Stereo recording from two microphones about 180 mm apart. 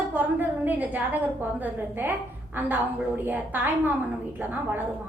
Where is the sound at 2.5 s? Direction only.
10° right (ahead or behind).